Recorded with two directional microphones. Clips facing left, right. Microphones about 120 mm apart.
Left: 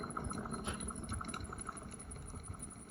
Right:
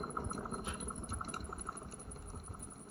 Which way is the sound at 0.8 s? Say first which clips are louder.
Even; 35° right (ahead or behind).